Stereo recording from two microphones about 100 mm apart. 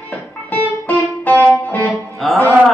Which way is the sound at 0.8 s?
20° left (ahead or behind).